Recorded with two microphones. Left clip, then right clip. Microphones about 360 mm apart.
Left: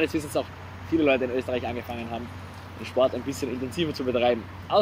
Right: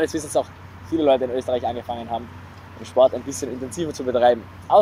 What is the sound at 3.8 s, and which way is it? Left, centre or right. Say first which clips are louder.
Speech: right 5 dB; right.